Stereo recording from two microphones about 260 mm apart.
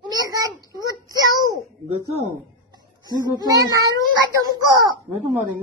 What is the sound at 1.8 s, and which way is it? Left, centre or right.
A child's voice, right.